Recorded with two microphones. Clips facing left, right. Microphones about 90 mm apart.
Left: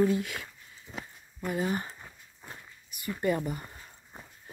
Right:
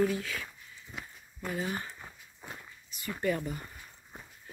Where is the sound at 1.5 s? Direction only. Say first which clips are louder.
Left 5 dB; 30° left (ahead or behind).